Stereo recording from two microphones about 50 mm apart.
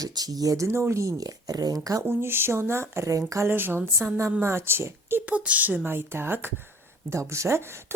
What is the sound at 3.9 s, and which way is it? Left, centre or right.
A woman's voice, right.